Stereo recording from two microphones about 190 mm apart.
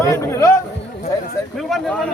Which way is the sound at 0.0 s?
15° left (ahead or behind).